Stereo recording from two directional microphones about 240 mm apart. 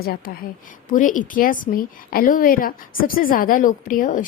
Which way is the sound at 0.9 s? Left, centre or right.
Left.